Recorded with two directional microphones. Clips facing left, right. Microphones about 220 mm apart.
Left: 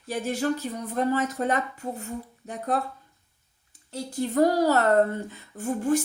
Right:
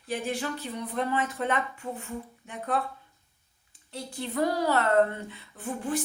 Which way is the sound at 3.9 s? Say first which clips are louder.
Left 7 dB; 45° left (ahead or behind).